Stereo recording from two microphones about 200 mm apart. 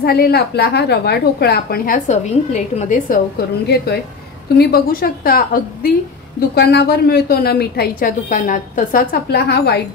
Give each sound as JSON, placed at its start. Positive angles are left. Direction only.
{"t": 0.0, "sound": "a woman's voice", "side_deg": 50}
{"t": 3.6, "sound": "a woman's voice", "side_deg": 55}